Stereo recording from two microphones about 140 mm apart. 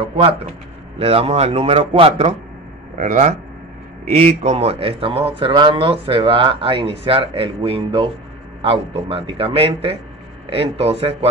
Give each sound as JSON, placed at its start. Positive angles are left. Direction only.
{"t": 0.1, "sound": "a man's voice", "side_deg": -45}
{"t": 3.0, "sound": "speech", "side_deg": -60}
{"t": 4.0, "sound": "a man's voice", "side_deg": -45}